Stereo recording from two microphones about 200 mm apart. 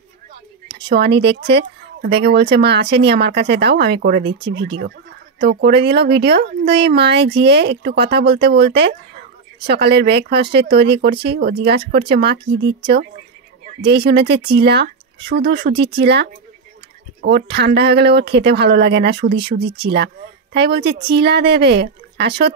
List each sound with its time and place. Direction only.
0.8 s speech: 55° right (ahead or behind)